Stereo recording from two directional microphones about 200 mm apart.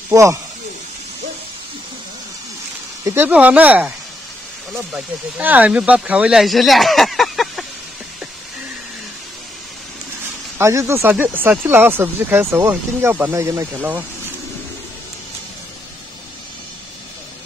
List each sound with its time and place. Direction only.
0.1 s speech: 15° right (ahead or behind)
3.0 s speech: 10° right (ahead or behind)
10.6 s speech: 15° right (ahead or behind)